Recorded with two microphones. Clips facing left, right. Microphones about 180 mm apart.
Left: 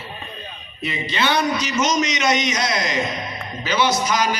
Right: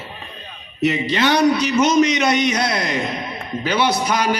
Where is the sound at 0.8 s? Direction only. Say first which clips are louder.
Right 5 dB; 75° right (ahead or behind).